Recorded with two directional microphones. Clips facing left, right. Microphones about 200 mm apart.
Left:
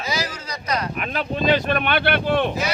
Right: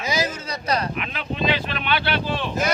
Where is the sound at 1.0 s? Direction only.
45° left (ahead or behind).